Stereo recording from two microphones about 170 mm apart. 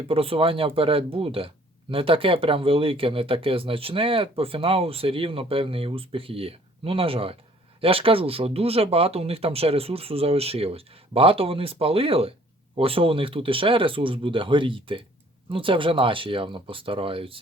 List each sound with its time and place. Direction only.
0.1 s speech: 35° right (ahead or behind)